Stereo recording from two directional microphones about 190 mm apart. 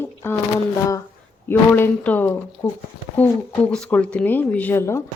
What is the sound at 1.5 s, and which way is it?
Speech, 10° left (ahead or behind).